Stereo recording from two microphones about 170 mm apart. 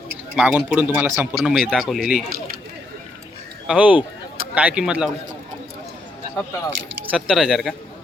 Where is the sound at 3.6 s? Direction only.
10° right (ahead or behind).